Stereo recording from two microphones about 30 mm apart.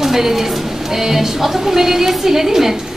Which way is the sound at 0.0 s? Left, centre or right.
Centre.